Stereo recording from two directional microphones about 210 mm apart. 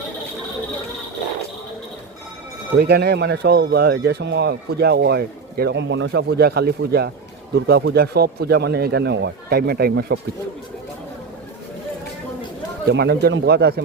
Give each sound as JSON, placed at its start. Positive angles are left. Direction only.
{"t": 2.7, "sound": "speech", "side_deg": -50}
{"t": 12.9, "sound": "speech", "side_deg": -50}